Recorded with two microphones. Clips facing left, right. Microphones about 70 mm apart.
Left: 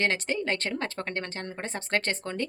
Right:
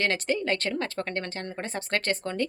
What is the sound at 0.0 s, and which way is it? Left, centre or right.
A woman's voice, left.